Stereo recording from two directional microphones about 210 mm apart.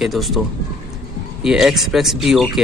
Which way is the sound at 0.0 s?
Centre (ahead or behind).